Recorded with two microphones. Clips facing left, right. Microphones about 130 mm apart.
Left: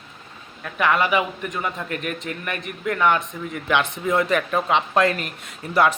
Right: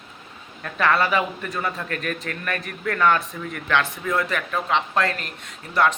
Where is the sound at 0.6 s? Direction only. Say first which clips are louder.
Even; 15° left (ahead or behind).